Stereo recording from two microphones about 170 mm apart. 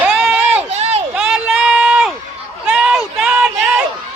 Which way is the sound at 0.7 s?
40° right (ahead or behind).